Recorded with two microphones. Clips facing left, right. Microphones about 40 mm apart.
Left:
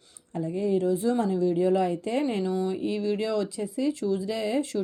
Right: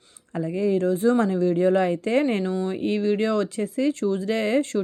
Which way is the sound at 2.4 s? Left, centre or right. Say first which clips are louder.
Right 1 dB; right.